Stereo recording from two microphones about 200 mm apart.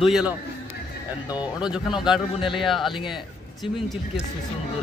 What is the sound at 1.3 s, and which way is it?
Speech, 5° right (ahead or behind).